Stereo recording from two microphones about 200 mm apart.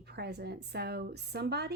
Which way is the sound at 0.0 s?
55° right (ahead or behind).